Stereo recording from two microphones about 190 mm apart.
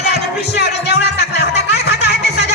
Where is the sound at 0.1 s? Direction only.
60° left (ahead or behind).